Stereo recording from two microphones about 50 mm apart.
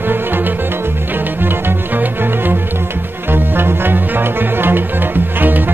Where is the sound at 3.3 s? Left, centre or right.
Right.